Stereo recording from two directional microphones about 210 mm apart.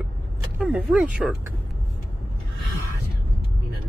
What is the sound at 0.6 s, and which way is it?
Speech, 5° right (ahead or behind).